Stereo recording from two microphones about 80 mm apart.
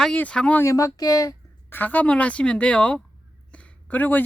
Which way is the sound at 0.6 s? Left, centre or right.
Left.